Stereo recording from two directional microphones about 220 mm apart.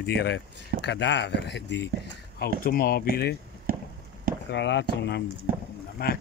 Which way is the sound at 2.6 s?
40° left (ahead or behind).